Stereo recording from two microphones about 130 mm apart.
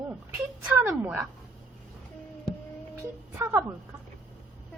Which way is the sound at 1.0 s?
15° right (ahead or behind).